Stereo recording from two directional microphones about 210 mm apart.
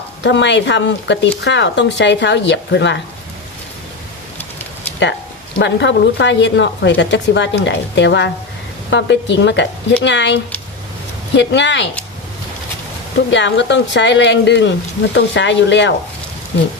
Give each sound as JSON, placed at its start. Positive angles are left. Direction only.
{"t": 0.2, "sound": "speech", "side_deg": 60}
{"t": 5.5, "sound": "speech", "side_deg": 60}
{"t": 11.3, "sound": "speech", "side_deg": 60}
{"t": 13.3, "sound": "speech", "side_deg": 55}